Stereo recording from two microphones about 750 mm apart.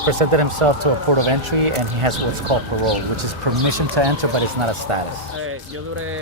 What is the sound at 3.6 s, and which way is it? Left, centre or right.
Speech, right.